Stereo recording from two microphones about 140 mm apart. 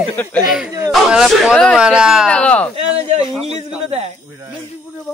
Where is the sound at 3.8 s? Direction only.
50° right (ahead or behind).